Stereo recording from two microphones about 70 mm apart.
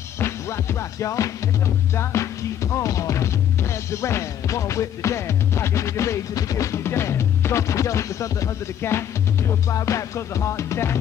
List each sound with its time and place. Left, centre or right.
0.2 s music: left